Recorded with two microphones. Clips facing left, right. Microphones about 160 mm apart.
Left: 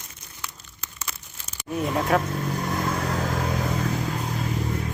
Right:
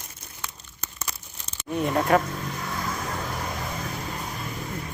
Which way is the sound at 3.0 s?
75° left (ahead or behind).